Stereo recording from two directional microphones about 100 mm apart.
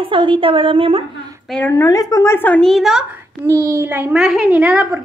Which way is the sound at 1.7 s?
35° left (ahead or behind).